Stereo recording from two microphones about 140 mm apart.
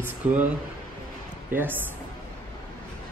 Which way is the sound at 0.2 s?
10° right (ahead or behind).